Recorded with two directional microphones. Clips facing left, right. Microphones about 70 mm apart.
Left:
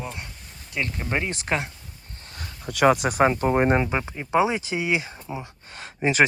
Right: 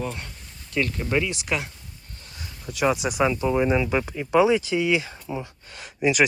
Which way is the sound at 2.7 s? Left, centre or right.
Left.